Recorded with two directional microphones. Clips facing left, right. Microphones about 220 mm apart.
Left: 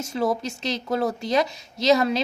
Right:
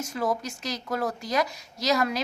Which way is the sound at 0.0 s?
25° left (ahead or behind).